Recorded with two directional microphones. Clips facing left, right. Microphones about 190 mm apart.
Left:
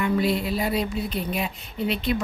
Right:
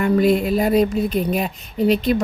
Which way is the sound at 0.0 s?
50° right (ahead or behind).